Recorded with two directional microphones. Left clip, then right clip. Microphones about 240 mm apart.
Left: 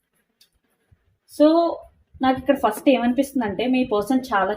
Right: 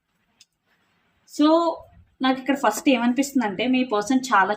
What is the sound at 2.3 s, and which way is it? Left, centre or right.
Speech, centre.